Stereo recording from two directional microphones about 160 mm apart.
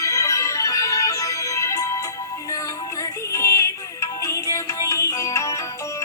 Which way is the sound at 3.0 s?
20° left (ahead or behind).